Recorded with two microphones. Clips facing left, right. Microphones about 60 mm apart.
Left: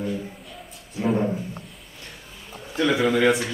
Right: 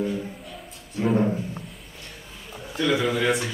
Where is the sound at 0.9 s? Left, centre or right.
Centre.